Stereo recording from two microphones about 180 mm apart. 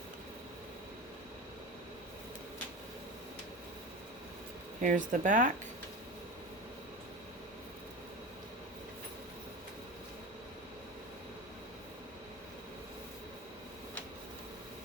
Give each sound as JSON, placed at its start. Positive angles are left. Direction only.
{"t": 4.8, "sound": "speech", "side_deg": -45}